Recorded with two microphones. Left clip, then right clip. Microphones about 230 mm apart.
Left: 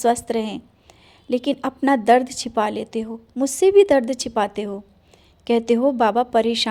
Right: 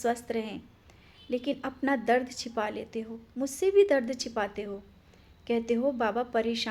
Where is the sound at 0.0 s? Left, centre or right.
Left.